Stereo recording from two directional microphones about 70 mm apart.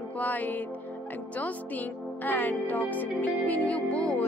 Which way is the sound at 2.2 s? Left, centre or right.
Left.